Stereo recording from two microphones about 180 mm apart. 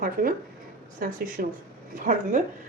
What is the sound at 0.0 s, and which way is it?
A woman's voice, 50° right (ahead or behind).